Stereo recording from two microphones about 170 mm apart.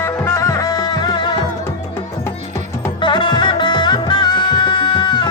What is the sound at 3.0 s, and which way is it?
Music, 25° left (ahead or behind).